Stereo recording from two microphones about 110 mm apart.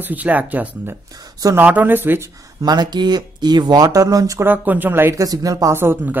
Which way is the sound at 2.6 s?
40° right (ahead or behind).